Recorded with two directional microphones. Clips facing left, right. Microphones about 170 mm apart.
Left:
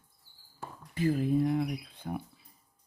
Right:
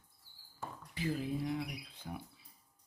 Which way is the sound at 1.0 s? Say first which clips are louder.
Left 9 dB; 50° left (ahead or behind).